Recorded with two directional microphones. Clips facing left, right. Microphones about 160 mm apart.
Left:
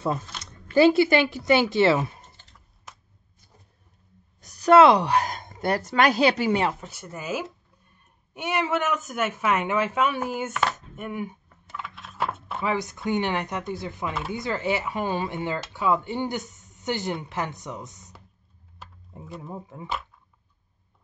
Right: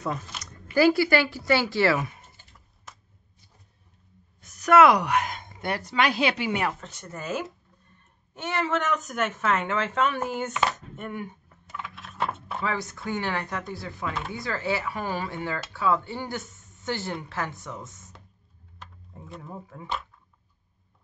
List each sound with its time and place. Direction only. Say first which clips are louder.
0.7 s speech: left 3 dB; 25° left (ahead or behind)
4.4 s speech: left 2 dB; 35° left (ahead or behind)
6.8 s speech: left 1 dB; 10° left (ahead or behind)
11.4 s a sound: left 1 dB; centre (ahead or behind)
12.6 s speech: left 4 dB; 20° left (ahead or behind)
18.8 s a sound: left 1 dB; 5° left (ahead or behind)
19.4 s speech: left 3 dB; 20° left (ahead or behind)